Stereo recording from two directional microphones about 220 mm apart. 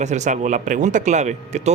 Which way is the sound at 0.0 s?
30° right (ahead or behind).